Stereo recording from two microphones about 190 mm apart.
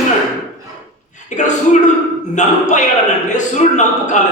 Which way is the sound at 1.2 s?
40° left (ahead or behind).